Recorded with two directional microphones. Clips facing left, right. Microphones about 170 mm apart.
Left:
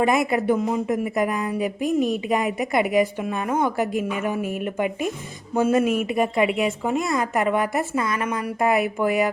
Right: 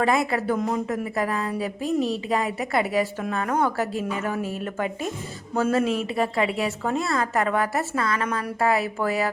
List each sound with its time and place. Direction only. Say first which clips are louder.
0.3 s a woman's voice: left 3 dB; 15° left (ahead or behind)
2.0 s a woman's voice: left 3 dB; 30° right (ahead or behind)
2.6 s a woman's voice: left 3 dB; 15° left (ahead or behind)